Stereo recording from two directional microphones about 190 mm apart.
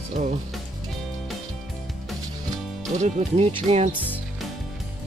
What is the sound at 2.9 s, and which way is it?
Speech, 35° right (ahead or behind).